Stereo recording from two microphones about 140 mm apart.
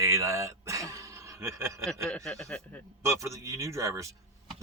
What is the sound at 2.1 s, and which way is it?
Speech, 5° left (ahead or behind).